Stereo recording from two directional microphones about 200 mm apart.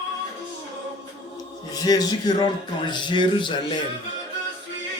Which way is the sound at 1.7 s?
20° left (ahead or behind).